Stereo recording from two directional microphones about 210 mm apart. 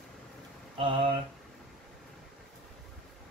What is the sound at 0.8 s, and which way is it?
Speech, 25° right (ahead or behind).